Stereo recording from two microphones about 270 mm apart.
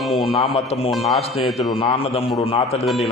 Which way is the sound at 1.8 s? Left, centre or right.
Left.